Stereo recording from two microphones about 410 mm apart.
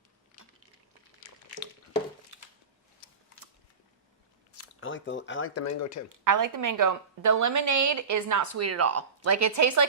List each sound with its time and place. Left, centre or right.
2.3 s a sound: right
4.5 s speech: left
6.2 s a woman's voice: right